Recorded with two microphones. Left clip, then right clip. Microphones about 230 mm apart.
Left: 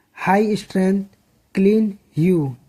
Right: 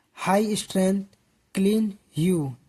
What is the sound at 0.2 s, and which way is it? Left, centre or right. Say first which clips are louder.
Speech: left 5 dB; right.